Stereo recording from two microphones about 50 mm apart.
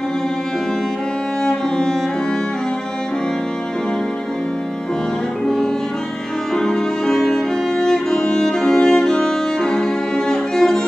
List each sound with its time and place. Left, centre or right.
1.4 s music: centre
6.5 s music: centre